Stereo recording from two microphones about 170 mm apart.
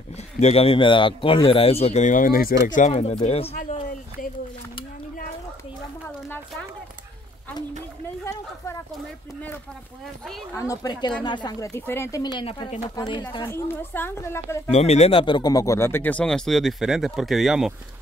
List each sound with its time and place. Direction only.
0.1 s speech: 40° left (ahead or behind)
10.5 s speech: 20° left (ahead or behind)
11.7 s speech: 15° left (ahead or behind)
13.5 s speech: 15° left (ahead or behind)
14.7 s speech: 40° left (ahead or behind); by 17.7 s centre (ahead or behind)